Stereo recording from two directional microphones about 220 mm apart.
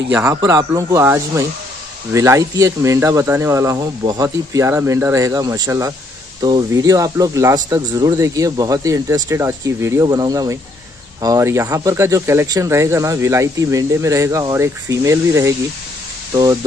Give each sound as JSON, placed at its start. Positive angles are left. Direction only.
{"t": 0.1, "sound": "speech", "side_deg": -10}